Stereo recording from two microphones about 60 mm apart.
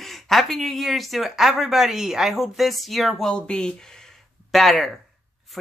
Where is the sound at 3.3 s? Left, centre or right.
Centre.